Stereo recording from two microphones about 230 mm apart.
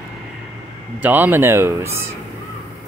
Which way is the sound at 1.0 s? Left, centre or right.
Centre.